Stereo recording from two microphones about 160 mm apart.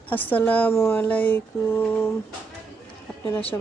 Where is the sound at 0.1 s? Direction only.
10° left (ahead or behind).